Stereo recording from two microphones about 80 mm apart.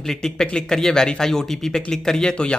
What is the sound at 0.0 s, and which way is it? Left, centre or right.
Speech, centre.